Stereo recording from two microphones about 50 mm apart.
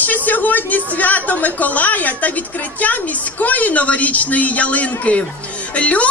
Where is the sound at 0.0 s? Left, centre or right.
Left.